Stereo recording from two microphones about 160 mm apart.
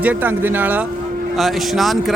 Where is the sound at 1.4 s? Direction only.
Centre (ahead or behind).